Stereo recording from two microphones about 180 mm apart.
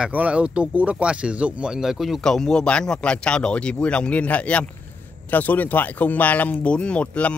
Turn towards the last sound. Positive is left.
turn(degrees=5)  # may be behind; listen again after turning